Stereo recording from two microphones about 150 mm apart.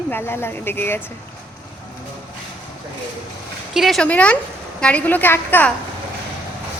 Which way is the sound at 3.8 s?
Centre (ahead or behind).